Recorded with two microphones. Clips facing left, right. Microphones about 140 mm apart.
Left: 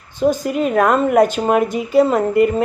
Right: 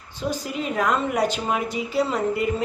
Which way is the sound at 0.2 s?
50° left (ahead or behind).